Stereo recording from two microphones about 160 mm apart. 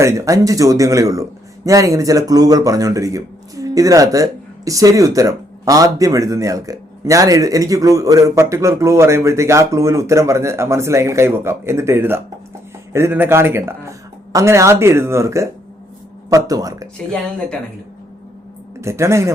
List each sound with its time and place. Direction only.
0.0 s speech: 20° right (ahead or behind)
18.8 s speech: 15° right (ahead or behind)